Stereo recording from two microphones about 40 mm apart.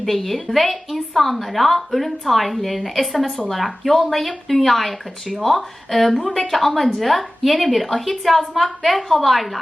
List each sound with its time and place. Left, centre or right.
0.0 s a woman's voice: centre